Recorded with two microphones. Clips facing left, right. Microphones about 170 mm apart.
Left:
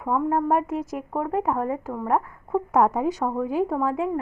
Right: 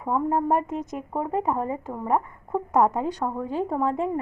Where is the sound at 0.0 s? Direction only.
Centre (ahead or behind).